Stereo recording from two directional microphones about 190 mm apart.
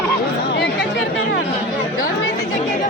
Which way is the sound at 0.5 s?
65° left (ahead or behind).